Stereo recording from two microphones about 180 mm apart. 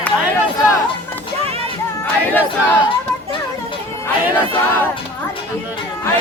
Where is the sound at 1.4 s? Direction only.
35° right (ahead or behind).